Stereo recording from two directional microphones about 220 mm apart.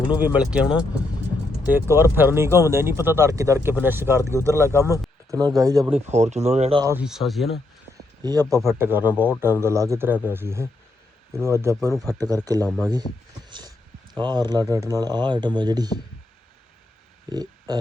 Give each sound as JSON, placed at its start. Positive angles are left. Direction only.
{"t": 0.1, "sound": "speech", "side_deg": -5}
{"t": 5.8, "sound": "speech", "side_deg": -30}
{"t": 6.8, "sound": "speech", "side_deg": -5}
{"t": 8.2, "sound": "speech", "side_deg": -15}
{"t": 13.5, "sound": "speech", "side_deg": -20}
{"t": 17.3, "sound": "a sound", "side_deg": -20}